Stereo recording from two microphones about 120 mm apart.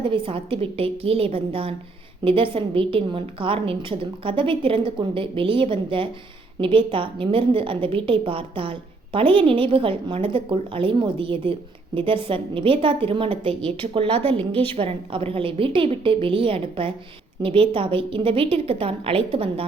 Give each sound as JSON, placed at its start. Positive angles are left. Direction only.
{"t": 0.0, "sound": "a woman's voice", "side_deg": -50}